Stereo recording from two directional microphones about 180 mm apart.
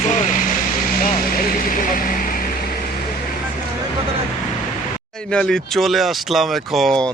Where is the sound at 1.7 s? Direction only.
50° left (ahead or behind).